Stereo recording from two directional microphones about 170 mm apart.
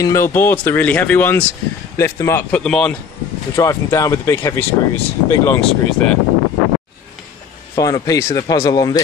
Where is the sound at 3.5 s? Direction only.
20° left (ahead or behind).